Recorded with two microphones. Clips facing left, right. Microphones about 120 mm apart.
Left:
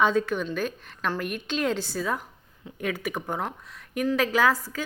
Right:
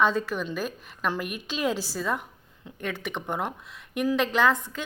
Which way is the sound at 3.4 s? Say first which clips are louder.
Right 1 dB; 5° right (ahead or behind).